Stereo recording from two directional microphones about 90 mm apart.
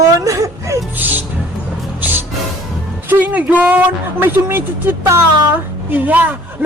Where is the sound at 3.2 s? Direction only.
15° right (ahead or behind).